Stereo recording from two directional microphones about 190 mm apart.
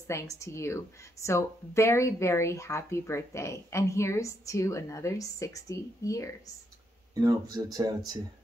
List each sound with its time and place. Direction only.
0.1 s speech: 15° left (ahead or behind)
7.2 s speech: 20° right (ahead or behind)